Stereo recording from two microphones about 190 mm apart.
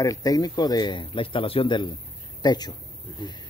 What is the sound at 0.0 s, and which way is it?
Speech, 20° left (ahead or behind).